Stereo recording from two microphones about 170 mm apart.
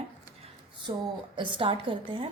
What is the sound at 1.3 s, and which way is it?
Speech, 30° right (ahead or behind).